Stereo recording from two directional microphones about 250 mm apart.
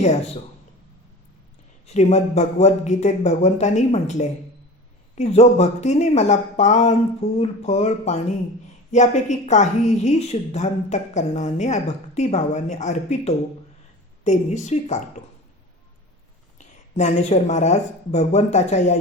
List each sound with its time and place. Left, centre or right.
1.9 s a woman's voice: left
16.6 s a woman's voice: left